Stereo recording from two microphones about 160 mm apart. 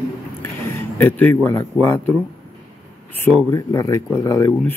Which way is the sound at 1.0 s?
15° left (ahead or behind).